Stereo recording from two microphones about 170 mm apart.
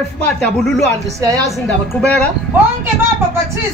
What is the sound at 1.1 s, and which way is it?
Speech, 20° right (ahead or behind).